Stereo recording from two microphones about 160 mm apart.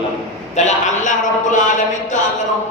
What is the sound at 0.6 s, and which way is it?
A man's voice, 45° left (ahead or behind).